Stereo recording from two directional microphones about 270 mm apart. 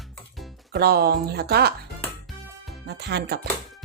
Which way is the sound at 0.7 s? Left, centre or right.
Right.